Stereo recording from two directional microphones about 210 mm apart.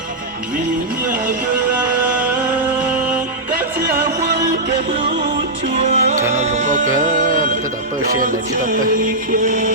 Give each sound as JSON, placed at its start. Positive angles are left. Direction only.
{"t": 4.9, "sound": "music", "side_deg": -35}